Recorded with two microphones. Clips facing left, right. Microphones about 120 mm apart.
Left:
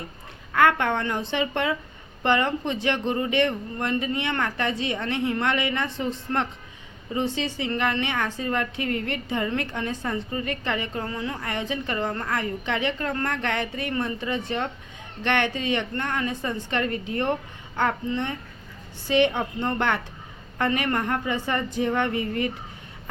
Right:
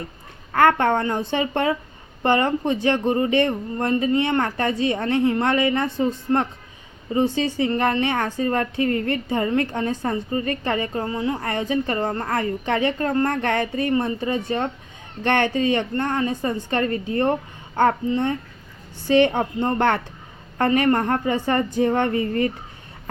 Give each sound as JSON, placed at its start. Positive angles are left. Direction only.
{"t": 0.5, "sound": "a woman's voice", "side_deg": -40}